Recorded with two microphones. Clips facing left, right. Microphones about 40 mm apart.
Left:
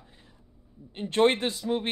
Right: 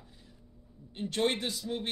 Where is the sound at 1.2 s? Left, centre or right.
Left.